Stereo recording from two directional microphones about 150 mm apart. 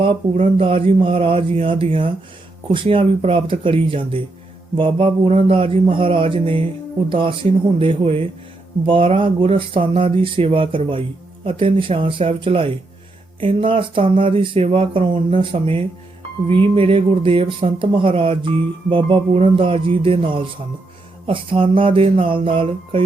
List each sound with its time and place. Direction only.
0.5 s speech: 35° right (ahead or behind)